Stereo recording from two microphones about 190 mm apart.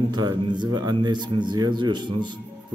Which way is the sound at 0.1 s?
20° right (ahead or behind).